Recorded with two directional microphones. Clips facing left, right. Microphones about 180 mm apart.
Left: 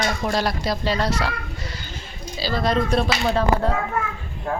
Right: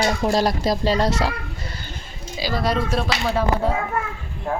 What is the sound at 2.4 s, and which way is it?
Speech, 10° right (ahead or behind).